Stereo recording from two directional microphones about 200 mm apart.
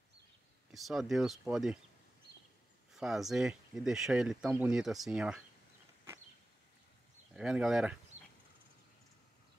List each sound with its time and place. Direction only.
0.7 s speech: centre (ahead or behind)
2.3 s a sound: 55° right (ahead or behind)
2.9 s speech: centre (ahead or behind)
7.3 s speech: 5° right (ahead or behind)